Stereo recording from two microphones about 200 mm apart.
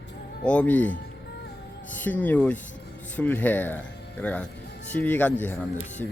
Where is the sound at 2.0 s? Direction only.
10° left (ahead or behind).